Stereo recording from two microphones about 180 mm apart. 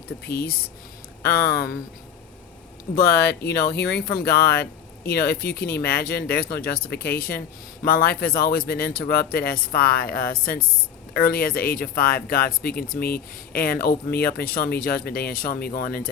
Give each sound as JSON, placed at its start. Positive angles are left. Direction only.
{"t": 0.3, "sound": "speech", "side_deg": 60}
{"t": 2.9, "sound": "speech", "side_deg": 60}